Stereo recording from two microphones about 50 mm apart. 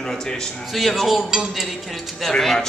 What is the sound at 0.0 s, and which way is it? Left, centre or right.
Speech, centre.